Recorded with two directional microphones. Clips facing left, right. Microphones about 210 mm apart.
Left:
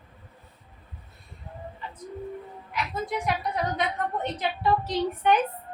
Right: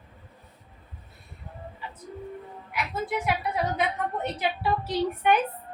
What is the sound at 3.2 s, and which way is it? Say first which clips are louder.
A woman's voice: even; 5° right (ahead or behind).